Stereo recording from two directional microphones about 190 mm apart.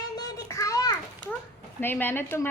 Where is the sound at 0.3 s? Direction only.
15° left (ahead or behind).